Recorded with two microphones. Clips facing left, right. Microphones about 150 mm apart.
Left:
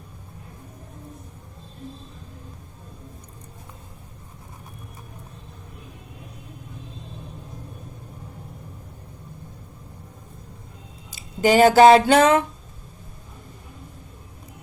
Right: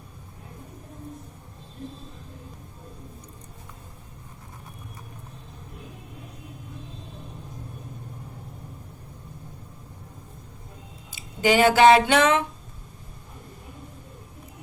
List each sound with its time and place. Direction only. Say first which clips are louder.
11.1 s speech: left 3 dB; 40° left (ahead or behind)